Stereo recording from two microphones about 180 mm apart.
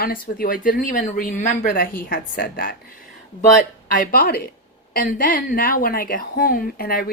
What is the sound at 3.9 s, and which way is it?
Speech, 50° left (ahead or behind).